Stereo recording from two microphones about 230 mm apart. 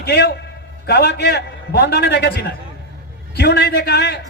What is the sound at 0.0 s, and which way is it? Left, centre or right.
Speech, left.